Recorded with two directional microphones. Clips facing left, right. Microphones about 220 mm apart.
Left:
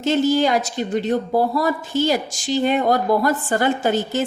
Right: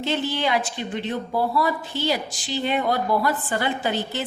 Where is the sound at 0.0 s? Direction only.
45° left (ahead or behind).